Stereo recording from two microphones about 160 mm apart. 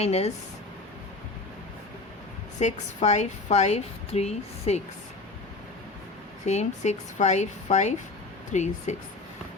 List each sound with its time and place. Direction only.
0.0 s speech: 40° left (ahead or behind)
2.6 s a woman's voice: 45° left (ahead or behind)
6.4 s a woman's voice: 45° left (ahead or behind)